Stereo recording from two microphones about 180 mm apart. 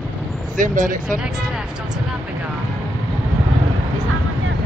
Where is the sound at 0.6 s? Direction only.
45° right (ahead or behind).